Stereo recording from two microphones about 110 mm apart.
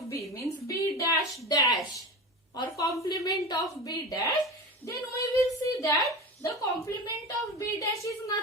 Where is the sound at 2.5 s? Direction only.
35° left (ahead or behind).